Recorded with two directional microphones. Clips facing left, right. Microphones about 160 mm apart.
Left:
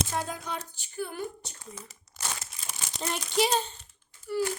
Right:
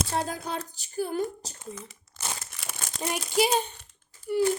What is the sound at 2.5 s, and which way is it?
Crumpling, 60° right (ahead or behind).